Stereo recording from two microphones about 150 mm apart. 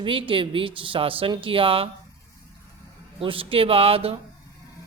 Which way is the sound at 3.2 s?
35° right (ahead or behind).